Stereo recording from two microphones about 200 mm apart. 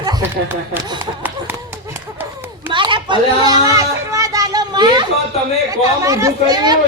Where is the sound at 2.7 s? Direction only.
25° right (ahead or behind).